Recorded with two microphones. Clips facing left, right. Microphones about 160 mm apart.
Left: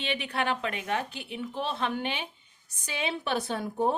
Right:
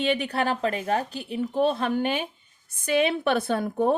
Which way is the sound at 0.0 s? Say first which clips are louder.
Right 6 dB; 45° right (ahead or behind).